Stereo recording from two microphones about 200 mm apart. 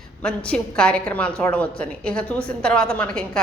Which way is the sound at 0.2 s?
5° left (ahead or behind).